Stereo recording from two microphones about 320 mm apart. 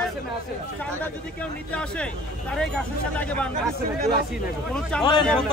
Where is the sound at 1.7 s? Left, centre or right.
Centre.